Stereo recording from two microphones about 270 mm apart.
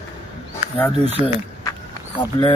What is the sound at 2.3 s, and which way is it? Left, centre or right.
Speech, centre.